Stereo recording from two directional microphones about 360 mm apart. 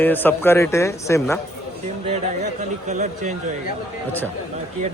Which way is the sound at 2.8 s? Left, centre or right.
Centre.